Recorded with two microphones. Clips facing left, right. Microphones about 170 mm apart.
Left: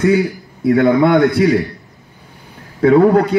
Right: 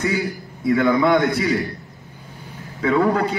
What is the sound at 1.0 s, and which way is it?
Speech, 55° left (ahead or behind).